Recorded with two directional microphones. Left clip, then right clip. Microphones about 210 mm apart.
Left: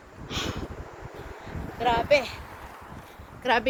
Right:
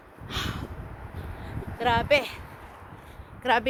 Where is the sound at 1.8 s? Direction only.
25° right (ahead or behind).